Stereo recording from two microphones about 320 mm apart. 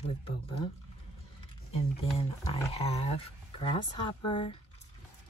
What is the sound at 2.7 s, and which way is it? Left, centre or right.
A woman's voice, centre.